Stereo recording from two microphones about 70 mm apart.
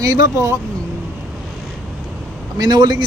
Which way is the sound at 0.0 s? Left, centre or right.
Right.